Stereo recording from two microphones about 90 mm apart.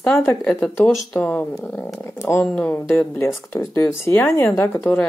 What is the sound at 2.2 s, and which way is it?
Speech, 15° left (ahead or behind).